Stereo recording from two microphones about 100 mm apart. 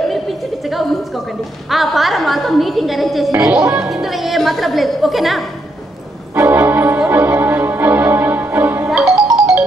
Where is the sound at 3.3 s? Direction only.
30° right (ahead or behind).